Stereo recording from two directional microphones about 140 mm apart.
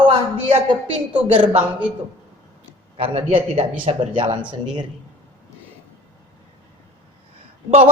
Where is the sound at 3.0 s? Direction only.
40° right (ahead or behind).